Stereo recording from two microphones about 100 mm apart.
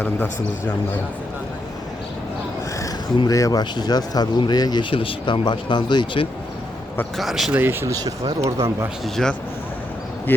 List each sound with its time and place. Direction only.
3.2 s speech: 35° left (ahead or behind)
7.2 s speech: centre (ahead or behind)
7.5 s speech: 20° right (ahead or behind)
9.2 s speech: 5° left (ahead or behind)
10.3 s speech: 20° left (ahead or behind)